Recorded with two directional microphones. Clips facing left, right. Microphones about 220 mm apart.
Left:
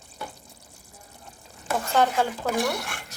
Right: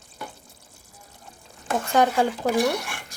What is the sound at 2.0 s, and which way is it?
Speech, 15° right (ahead or behind).